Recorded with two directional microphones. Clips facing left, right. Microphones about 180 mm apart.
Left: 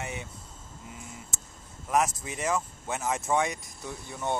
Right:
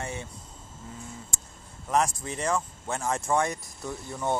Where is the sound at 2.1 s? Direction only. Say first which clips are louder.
Right 3 dB; 20° left (ahead or behind).